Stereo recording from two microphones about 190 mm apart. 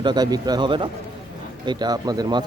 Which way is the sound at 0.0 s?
20° right (ahead or behind).